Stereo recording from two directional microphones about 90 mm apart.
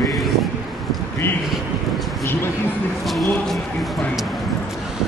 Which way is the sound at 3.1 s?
Centre (ahead or behind).